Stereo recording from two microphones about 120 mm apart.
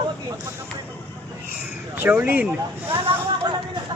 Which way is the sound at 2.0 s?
15° right (ahead or behind).